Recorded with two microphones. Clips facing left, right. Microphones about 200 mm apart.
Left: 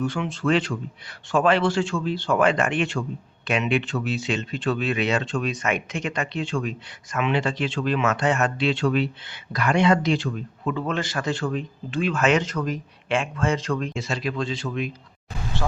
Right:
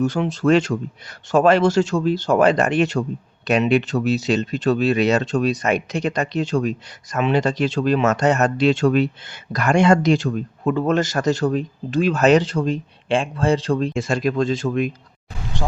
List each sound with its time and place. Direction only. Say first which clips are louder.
0.0 s speech: right 6 dB; 40° right (ahead or behind)
13.9 s speech: right 7 dB; 50° right (ahead or behind)